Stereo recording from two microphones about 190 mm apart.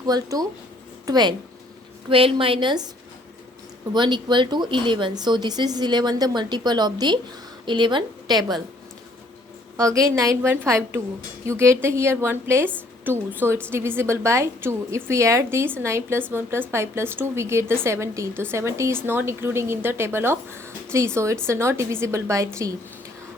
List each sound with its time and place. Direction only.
0.0 s speech: 20° right (ahead or behind)
3.9 s speech: 25° right (ahead or behind)
9.7 s a woman's voice: 15° right (ahead or behind)